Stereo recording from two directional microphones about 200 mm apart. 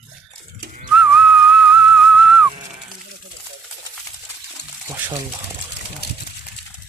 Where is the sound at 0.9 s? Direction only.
5° right (ahead or behind).